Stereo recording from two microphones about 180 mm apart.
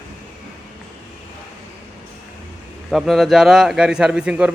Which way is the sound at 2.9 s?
Centre (ahead or behind).